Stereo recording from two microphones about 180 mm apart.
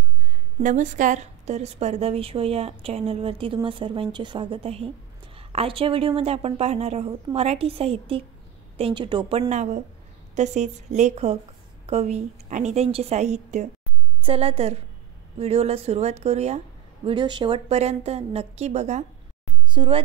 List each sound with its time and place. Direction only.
0.6 s a woman's voice: 45° right (ahead or behind); by 9.5 s 25° right (ahead or behind)
9.5 s a woman's voice: 40° right (ahead or behind)
19.7 s a woman's voice: 30° right (ahead or behind)